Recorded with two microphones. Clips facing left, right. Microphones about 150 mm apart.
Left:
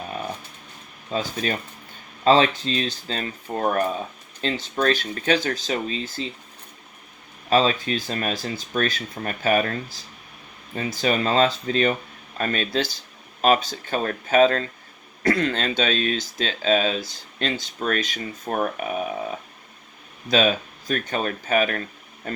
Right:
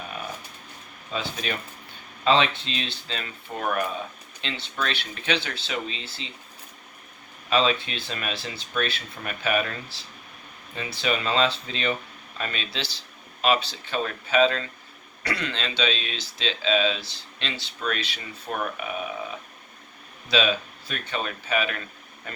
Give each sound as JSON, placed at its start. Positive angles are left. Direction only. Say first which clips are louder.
{"t": 1.1, "sound": "speech", "louder": "left 5 dB", "side_deg": 40}
{"t": 7.5, "sound": "speech", "louder": "left 4 dB", "side_deg": 40}
{"t": 20.2, "sound": "speech", "louder": "left 4 dB", "side_deg": 45}